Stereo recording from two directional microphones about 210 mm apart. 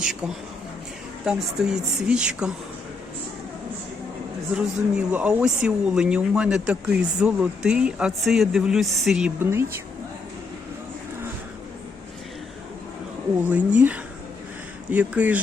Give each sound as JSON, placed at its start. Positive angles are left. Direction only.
{"t": 0.0, "sound": "speech", "side_deg": -5}
{"t": 4.5, "sound": "speech", "side_deg": -5}
{"t": 13.5, "sound": "speech", "side_deg": -5}